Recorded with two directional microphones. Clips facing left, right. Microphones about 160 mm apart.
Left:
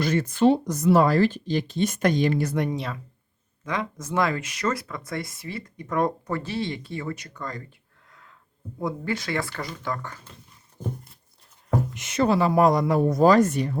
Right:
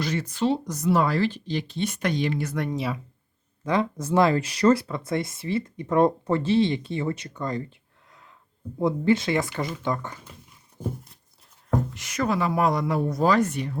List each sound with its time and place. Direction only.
0.0 s speech: 50° left (ahead or behind)
2.7 s speech: 5° right (ahead or behind)
3.6 s speech: 30° right (ahead or behind)
8.8 s speech: 25° right (ahead or behind)
11.9 s speech: 25° left (ahead or behind); by 13.7 s 40° left (ahead or behind)